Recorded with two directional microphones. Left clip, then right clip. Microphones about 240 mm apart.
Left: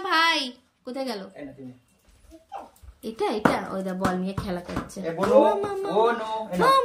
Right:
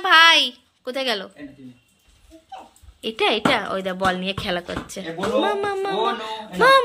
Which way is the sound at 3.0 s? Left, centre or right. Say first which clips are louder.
Right 4 dB; centre.